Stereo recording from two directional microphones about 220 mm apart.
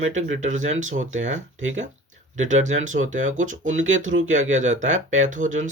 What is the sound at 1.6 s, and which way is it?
Speech, 60° right (ahead or behind).